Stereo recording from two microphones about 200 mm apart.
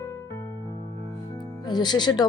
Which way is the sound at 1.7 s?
20° left (ahead or behind).